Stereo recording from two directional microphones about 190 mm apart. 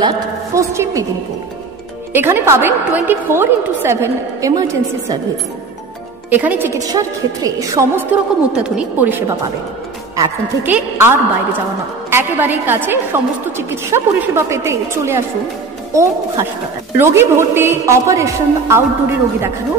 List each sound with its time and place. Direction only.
0.6 s a woman's voice: 15° right (ahead or behind)
2.1 s a woman's voice: 10° right (ahead or behind)
6.3 s a woman's voice: 10° right (ahead or behind)